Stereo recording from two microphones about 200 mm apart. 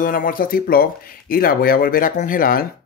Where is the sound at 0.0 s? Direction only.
45° left (ahead or behind).